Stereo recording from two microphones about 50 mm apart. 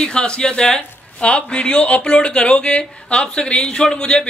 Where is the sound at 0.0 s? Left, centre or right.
Centre.